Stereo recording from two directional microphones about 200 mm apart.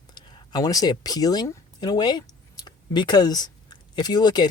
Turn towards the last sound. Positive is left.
turn(degrees=20)  # may be behind; listen again after turning